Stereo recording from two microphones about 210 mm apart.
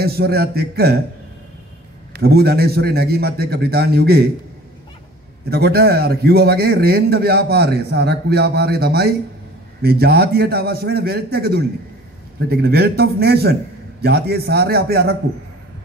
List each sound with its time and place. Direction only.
0.0 s a man's voice: 50° right (ahead or behind)
2.1 s a man's voice: 50° right (ahead or behind)
5.5 s a man's voice: 50° right (ahead or behind)